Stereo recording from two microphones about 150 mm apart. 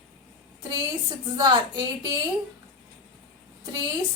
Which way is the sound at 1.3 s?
30° right (ahead or behind).